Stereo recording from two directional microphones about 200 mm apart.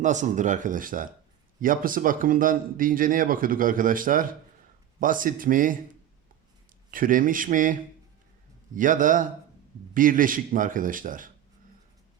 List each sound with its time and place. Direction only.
0.0 s speech: 35° right (ahead or behind)
6.9 s speech: 45° right (ahead or behind)